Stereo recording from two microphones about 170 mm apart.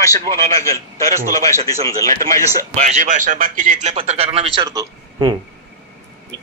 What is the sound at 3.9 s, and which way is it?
Speech, 35° right (ahead or behind).